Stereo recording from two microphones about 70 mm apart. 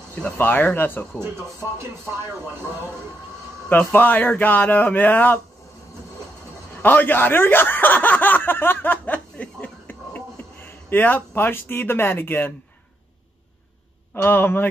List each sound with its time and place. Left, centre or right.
0.1 s speech: left
1.8 s speech: right
3.6 s speech: left
6.8 s speech: left
14.1 s speech: left